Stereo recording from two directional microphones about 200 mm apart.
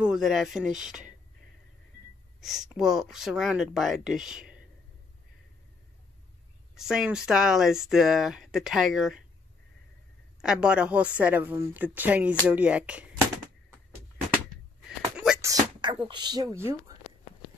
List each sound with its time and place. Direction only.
0.0 s speech: centre (ahead or behind)
2.4 s speech: centre (ahead or behind)
6.7 s speech: centre (ahead or behind)
10.4 s a woman's voice: 5° right (ahead or behind)
15.1 s a sound: 5° right (ahead or behind)
15.4 s a sound: 20° right (ahead or behind)
16.1 s speech: 20° right (ahead or behind)